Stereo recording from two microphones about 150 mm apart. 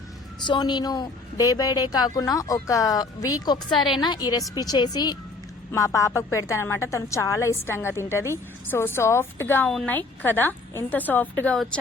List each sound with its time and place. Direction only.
0.4 s a woman's voice: 30° left (ahead or behind); by 11.8 s 5° left (ahead or behind)